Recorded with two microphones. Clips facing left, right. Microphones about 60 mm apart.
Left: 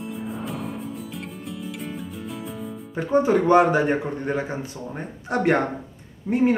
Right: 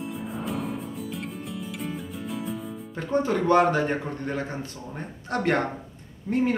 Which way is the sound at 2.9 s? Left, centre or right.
Centre.